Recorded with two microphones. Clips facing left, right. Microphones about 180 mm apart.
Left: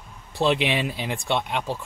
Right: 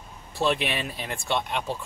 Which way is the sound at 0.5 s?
90° left.